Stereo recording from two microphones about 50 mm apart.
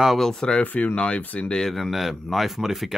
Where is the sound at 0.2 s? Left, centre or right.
Centre.